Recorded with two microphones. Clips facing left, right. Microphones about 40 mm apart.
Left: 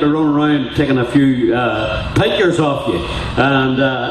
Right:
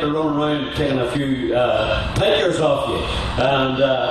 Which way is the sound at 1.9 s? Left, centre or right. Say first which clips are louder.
Left 2 dB; left.